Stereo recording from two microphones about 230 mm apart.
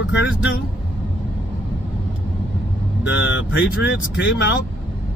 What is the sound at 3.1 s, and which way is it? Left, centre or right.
Speech, left.